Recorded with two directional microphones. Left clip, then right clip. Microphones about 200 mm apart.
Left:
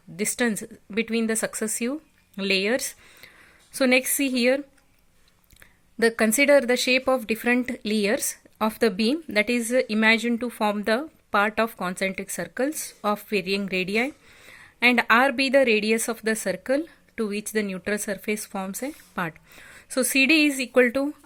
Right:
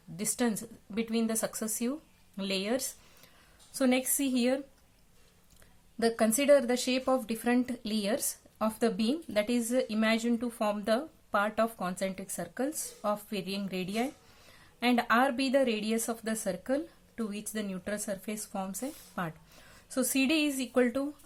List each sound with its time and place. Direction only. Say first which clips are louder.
0.2 s speech: left 7 dB; 35° left (ahead or behind)
6.0 s speech: left 8 dB; 40° left (ahead or behind)